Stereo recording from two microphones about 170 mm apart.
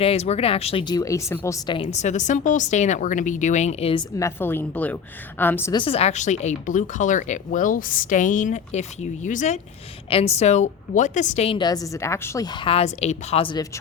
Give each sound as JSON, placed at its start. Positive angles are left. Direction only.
{"t": 0.0, "sound": "a woman's voice", "side_deg": 35}
{"t": 1.8, "sound": "speech", "side_deg": 40}
{"t": 4.2, "sound": "a woman's voice", "side_deg": 15}
{"t": 5.7, "sound": "speech", "side_deg": 30}
{"t": 10.1, "sound": "a woman's voice", "side_deg": 35}